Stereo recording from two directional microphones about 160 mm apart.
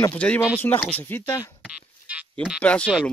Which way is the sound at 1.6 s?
5° right (ahead or behind).